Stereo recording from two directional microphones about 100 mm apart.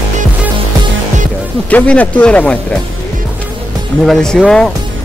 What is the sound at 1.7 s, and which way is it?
A man's voice, 15° left (ahead or behind).